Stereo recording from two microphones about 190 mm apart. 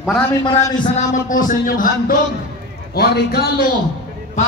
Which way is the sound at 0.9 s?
45° left (ahead or behind).